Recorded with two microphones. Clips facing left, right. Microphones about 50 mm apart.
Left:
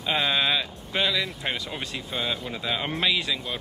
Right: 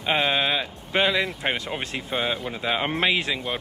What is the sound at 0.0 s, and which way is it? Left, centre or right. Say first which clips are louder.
Speech: right 2 dB; right.